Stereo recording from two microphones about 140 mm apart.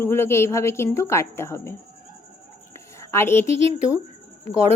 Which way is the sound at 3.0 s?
20° left (ahead or behind).